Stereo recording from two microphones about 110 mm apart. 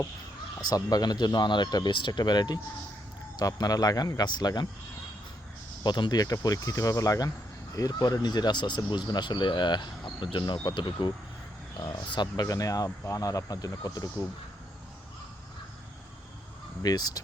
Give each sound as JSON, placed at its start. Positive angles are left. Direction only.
{"t": 0.7, "sound": "speech", "side_deg": 35}
{"t": 5.8, "sound": "speech", "side_deg": 40}
{"t": 16.8, "sound": "speech", "side_deg": 35}